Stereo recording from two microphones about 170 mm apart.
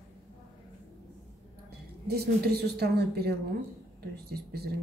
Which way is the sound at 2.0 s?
70° right (ahead or behind).